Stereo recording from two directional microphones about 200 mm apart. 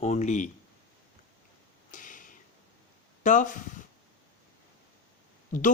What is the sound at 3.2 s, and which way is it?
Speech, 40° left (ahead or behind).